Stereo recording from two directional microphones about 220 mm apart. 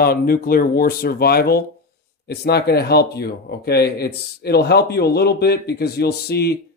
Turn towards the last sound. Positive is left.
turn(degrees=45)  # may be behind; listen again after turning